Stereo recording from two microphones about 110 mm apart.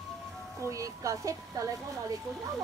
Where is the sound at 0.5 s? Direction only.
30° right (ahead or behind).